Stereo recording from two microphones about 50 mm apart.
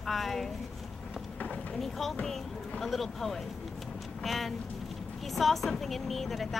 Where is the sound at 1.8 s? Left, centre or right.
Centre.